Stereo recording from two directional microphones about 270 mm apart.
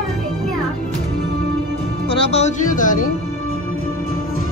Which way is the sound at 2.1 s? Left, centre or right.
Left.